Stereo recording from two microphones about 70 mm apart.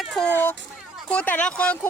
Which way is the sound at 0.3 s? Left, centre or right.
Left.